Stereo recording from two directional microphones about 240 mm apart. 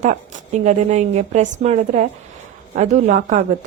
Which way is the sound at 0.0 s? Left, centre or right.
Right.